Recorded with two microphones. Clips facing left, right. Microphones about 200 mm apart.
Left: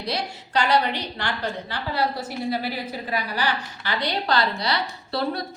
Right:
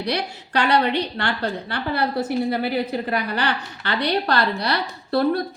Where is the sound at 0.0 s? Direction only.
60° right (ahead or behind).